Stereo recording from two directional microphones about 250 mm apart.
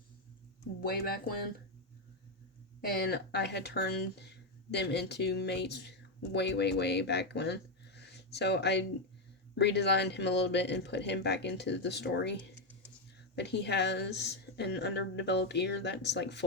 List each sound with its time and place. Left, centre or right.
0.8 s speech: left
2.9 s a woman's voice: left